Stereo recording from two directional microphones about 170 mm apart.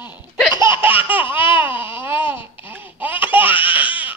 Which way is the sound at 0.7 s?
10° right (ahead or behind).